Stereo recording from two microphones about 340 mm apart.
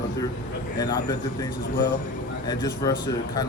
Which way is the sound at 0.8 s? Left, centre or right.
Centre.